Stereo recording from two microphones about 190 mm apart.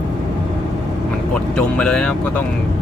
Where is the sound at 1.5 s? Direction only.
5° left (ahead or behind).